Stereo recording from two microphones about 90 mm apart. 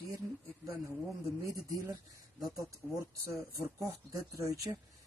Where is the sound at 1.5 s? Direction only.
40° right (ahead or behind).